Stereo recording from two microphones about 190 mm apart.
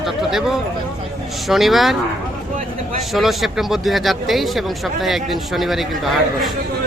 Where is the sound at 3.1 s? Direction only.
Centre (ahead or behind).